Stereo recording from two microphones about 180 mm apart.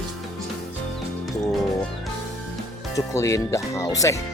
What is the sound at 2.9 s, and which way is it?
Speech, 15° left (ahead or behind).